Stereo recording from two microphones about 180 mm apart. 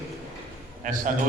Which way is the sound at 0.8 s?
45° right (ahead or behind).